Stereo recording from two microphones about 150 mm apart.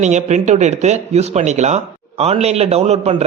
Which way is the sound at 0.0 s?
50° right (ahead or behind).